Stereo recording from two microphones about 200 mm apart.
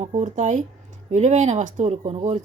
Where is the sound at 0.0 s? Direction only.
35° right (ahead or behind).